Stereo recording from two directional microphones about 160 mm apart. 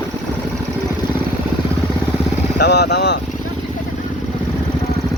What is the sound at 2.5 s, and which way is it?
Speech, 90° left.